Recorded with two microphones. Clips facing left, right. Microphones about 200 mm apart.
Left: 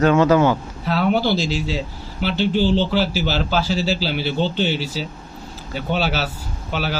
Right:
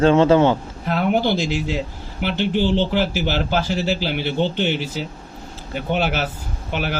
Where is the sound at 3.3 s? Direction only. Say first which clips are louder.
Even; 55° right (ahead or behind).